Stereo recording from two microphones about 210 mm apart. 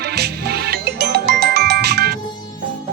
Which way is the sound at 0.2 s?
50° right (ahead or behind).